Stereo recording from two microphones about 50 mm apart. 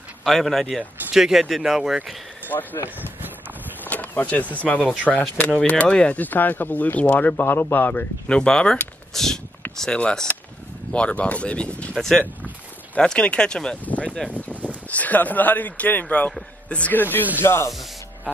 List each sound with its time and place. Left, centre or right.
0.2 s speech: centre
1.1 s speech: centre
2.5 s speech: left
6.1 s speech: left
8.3 s speech: centre
9.1 s a sound: centre
9.8 s speech: centre
11.9 s speech: centre
12.9 s speech: left
13.8 s speech: left
14.5 s a sound: right
14.9 s a man's voice: left
17.4 s spray: left
17.6 s spray: centre